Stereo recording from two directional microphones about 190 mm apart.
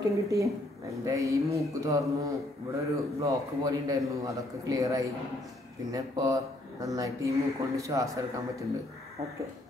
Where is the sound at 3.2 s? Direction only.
20° right (ahead or behind).